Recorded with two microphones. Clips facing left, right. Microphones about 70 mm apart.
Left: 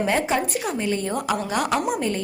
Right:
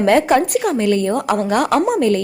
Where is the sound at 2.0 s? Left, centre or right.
Right.